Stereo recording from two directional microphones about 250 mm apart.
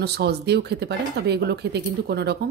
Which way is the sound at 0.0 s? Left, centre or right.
Right.